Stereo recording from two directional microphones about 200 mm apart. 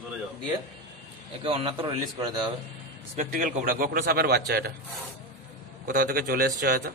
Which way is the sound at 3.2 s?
45° right (ahead or behind).